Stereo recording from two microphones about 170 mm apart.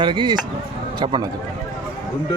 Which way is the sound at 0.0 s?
30° right (ahead or behind).